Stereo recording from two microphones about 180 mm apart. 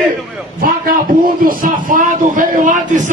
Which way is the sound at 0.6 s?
50° right (ahead or behind).